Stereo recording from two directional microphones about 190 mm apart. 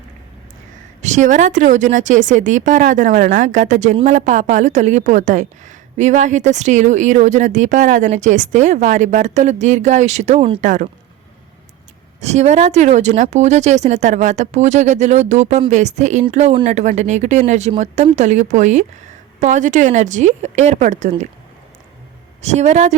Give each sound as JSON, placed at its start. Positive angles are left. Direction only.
{"t": 1.0, "sound": "a woman's voice", "side_deg": -40}
{"t": 10.6, "sound": "speech", "side_deg": -40}
{"t": 12.2, "sound": "a woman's voice", "side_deg": -35}
{"t": 22.4, "sound": "a woman's voice", "side_deg": -35}